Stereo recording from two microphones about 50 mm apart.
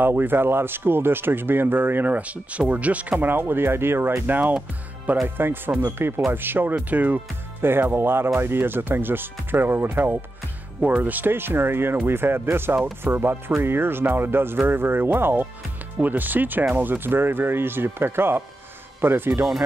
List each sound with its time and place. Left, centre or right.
0.0 s speech: right
4.3 s speech: right
5.4 s speech: right
6.7 s speech: right
7.6 s speech: right
10.8 s speech: right